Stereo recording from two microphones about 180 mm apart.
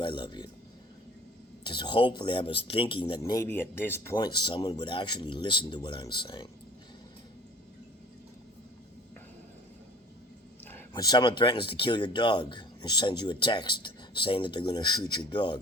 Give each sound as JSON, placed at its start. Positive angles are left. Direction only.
{"t": 0.0, "sound": "speech", "side_deg": 25}
{"t": 1.6, "sound": "speech", "side_deg": 25}
{"t": 10.7, "sound": "a sound", "side_deg": 10}
{"t": 11.0, "sound": "speech", "side_deg": 25}